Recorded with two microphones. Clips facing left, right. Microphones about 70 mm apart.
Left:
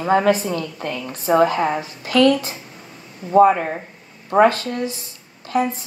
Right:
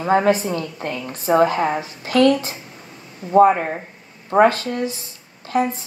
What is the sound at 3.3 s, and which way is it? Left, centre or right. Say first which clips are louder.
Speech: even; right.